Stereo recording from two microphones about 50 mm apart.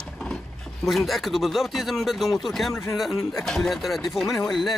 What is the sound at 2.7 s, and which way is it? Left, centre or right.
Speech, left.